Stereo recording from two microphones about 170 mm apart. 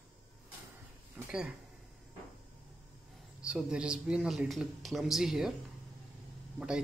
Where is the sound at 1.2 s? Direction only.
10° right (ahead or behind).